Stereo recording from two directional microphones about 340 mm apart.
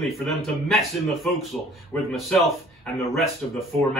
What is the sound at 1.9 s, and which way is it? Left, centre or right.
A man's voice, centre.